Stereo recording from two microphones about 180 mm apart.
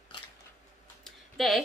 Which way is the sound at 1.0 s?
Centre (ahead or behind).